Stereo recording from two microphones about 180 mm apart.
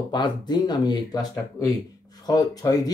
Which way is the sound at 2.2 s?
20° left (ahead or behind).